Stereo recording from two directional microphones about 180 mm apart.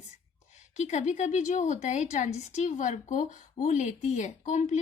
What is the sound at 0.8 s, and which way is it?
Speech, 40° left (ahead or behind).